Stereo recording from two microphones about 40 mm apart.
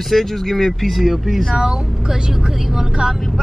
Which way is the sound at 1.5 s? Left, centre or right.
Centre.